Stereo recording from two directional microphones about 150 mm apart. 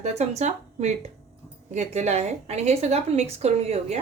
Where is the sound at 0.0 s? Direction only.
50° right (ahead or behind).